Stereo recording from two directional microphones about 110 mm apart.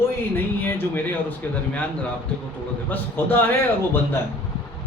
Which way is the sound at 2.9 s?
20° left (ahead or behind).